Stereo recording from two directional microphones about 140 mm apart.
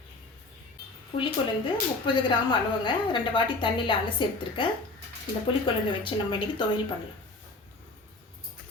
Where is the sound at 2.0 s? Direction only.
35° left (ahead or behind).